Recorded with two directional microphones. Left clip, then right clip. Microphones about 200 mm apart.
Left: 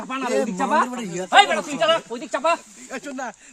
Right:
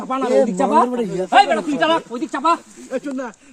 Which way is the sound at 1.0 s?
25° left (ahead or behind).